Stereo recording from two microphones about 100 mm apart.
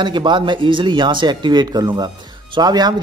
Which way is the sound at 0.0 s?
50° right (ahead or behind).